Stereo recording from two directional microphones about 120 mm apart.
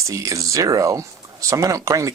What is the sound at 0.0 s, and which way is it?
Speech, 25° right (ahead or behind).